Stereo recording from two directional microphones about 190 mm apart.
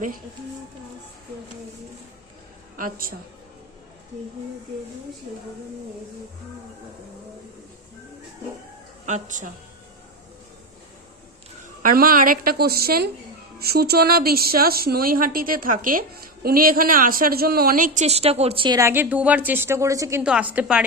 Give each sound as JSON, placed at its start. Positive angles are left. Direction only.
{"t": 2.7, "sound": "a woman's voice", "side_deg": -45}
{"t": 9.0, "sound": "a woman's voice", "side_deg": -40}
{"t": 11.8, "sound": "a woman's voice", "side_deg": -50}